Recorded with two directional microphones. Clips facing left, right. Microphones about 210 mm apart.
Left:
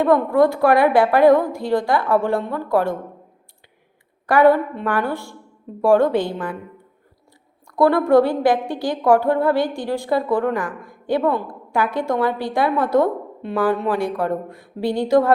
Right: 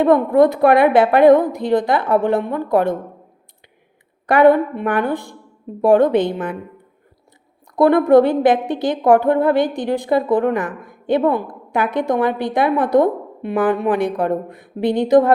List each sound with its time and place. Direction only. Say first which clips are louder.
0.0 s a woman's voice: right 3 dB; 20° right (ahead or behind)
4.3 s a woman's voice: right 2 dB; 20° right (ahead or behind)
7.8 s a woman's voice: right 3 dB; 20° right (ahead or behind)